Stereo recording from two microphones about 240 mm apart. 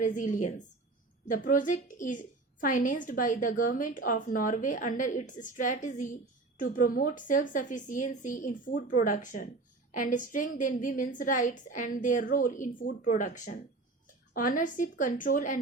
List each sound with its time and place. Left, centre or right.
0.0 s a woman's voice: left